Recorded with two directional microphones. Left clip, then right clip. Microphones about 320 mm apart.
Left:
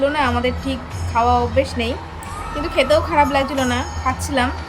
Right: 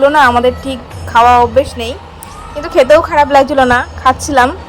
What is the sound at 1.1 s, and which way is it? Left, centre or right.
Speech, right.